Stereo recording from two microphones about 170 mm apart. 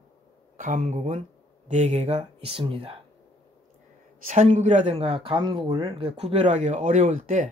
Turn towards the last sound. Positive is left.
turn(degrees=-50)  # may be behind; listen again after turning